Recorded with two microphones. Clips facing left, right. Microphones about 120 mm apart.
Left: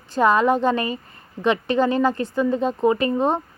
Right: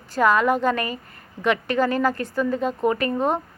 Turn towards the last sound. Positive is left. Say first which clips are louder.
# left 3 dB
turn(degrees=30)  # may be behind; listen again after turning